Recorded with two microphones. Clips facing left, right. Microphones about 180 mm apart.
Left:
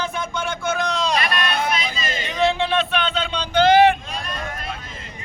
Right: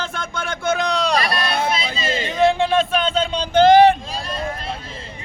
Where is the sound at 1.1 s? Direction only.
35° right (ahead or behind).